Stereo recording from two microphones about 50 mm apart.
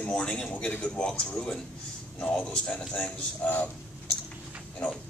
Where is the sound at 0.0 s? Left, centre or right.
Left.